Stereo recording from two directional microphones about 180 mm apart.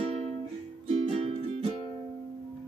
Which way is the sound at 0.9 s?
35° right (ahead or behind).